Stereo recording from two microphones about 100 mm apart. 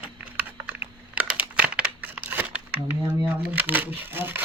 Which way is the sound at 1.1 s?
15° right (ahead or behind).